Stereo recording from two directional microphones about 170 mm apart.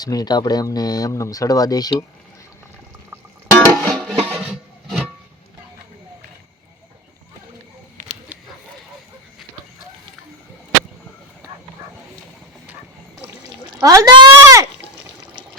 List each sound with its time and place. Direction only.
0.0 s speech: 20° left (ahead or behind)
3.5 s music: 5° left (ahead or behind)
13.7 s speech: 20° right (ahead or behind)